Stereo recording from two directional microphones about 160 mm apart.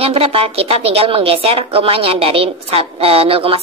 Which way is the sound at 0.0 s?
35° right (ahead or behind).